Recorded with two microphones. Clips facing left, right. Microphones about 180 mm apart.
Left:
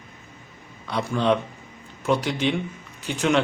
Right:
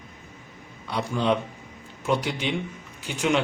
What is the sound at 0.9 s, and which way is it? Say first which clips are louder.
Speech: left 2 dB; 15° right (ahead or behind).